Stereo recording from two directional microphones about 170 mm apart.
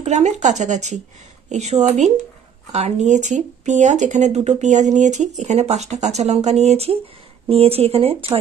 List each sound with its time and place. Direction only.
0.0 s speech: 40° right (ahead or behind)